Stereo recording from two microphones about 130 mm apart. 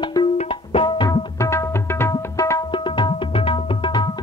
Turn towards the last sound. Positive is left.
turn(degrees=40)  # may be behind; listen again after turning